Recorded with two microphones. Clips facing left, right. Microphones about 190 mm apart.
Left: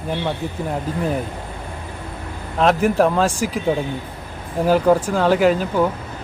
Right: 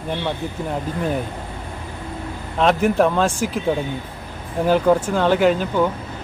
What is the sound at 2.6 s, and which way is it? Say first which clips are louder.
Speech: left 1 dB; centre (ahead or behind).